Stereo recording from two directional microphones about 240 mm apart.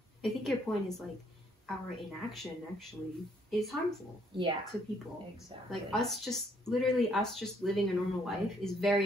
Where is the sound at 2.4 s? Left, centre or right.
Centre.